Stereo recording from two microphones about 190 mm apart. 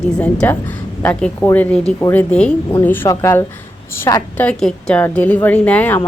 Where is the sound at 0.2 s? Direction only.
5° left (ahead or behind).